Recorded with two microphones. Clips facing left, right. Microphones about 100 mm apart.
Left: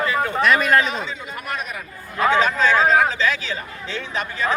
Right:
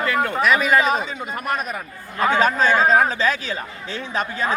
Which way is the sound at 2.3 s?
45° right (ahead or behind).